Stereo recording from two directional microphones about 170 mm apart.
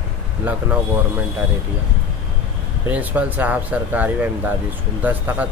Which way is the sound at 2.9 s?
10° right (ahead or behind).